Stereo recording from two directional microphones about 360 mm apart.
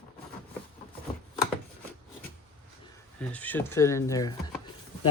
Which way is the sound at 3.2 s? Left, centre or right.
Centre.